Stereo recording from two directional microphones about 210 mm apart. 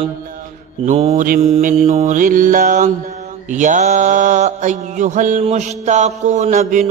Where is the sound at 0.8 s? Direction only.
30° right (ahead or behind).